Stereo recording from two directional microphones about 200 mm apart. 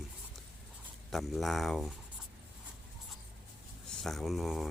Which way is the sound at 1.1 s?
Centre (ahead or behind).